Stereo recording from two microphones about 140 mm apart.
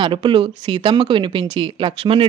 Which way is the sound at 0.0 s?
35° right (ahead or behind).